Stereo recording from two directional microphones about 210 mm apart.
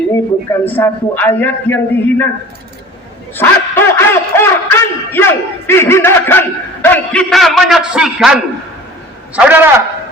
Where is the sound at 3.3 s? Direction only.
10° left (ahead or behind); by 9.7 s 5° right (ahead or behind).